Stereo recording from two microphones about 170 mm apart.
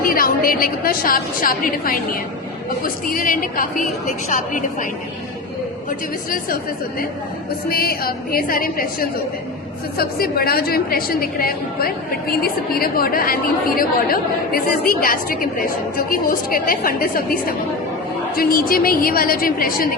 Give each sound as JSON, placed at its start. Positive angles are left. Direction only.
{"t": 0.0, "sound": "a woman's voice", "side_deg": 60}
{"t": 7.7, "sound": "a woman's voice", "side_deg": 60}